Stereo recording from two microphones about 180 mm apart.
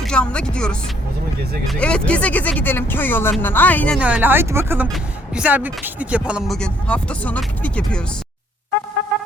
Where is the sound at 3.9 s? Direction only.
10° right (ahead or behind).